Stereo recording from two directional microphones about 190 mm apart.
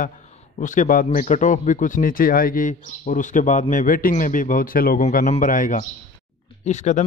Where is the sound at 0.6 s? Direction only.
45° left (ahead or behind).